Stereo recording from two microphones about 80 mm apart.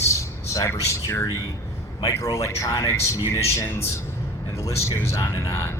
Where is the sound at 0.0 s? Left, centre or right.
Left.